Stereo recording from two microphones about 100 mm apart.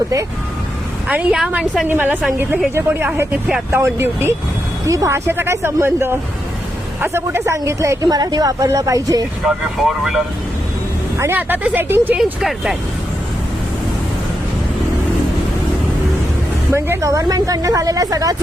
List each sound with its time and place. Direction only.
1.0 s a woman's voice: 10° right (ahead or behind); by 7.9 s 30° right (ahead or behind)
8.0 s speech: 45° right (ahead or behind)
9.7 s speech: centre (ahead or behind)
11.2 s speech: 20° right (ahead or behind)
12.4 s speech: centre (ahead or behind)
16.7 s speech: 30° right (ahead or behind)